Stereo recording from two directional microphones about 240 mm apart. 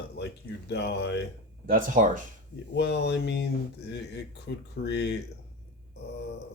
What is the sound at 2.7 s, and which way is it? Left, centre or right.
Speech, left.